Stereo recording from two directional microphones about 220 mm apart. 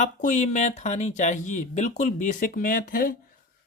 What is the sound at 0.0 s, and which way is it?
Speech, 35° left (ahead or behind).